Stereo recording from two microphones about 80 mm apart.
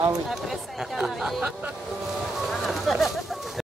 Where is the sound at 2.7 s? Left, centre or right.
Centre.